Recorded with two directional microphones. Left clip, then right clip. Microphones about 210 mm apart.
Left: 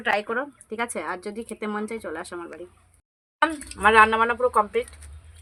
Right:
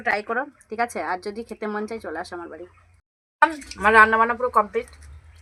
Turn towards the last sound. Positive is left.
turn(degrees=0)  # may be behind; listen again after turning